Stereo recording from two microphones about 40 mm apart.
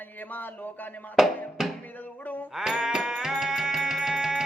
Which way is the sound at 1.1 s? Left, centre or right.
Centre.